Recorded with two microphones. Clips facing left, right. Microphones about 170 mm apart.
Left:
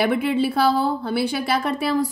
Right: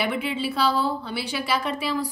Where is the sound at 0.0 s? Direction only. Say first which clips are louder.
Left 6 dB; 55° left (ahead or behind).